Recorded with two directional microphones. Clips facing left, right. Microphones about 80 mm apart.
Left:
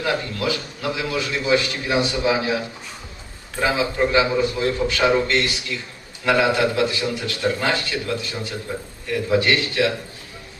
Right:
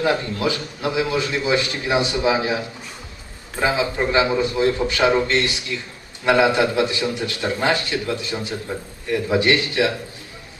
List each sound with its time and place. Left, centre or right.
0.0 s a man's voice: right